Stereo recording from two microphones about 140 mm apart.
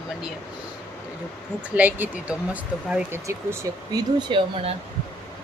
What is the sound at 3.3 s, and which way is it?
Speech, 25° right (ahead or behind).